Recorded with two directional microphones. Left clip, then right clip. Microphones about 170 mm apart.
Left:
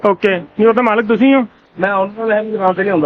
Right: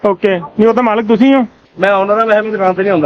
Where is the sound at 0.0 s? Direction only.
25° right (ahead or behind).